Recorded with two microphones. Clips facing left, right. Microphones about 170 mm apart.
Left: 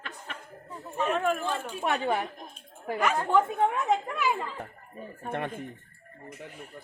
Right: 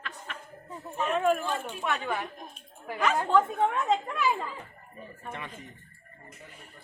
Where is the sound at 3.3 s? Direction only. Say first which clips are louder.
Even; 10° left (ahead or behind).